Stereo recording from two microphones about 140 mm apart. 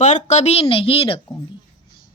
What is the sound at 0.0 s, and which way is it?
A woman's voice, 60° left (ahead or behind).